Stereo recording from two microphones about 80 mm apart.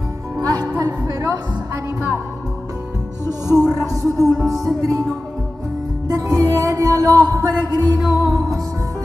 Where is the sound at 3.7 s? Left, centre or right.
Right.